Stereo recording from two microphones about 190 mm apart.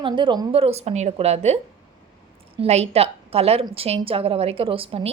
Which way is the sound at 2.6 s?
35° right (ahead or behind).